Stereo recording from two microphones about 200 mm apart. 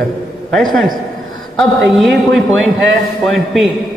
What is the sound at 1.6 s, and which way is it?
A man's voice, centre (ahead or behind).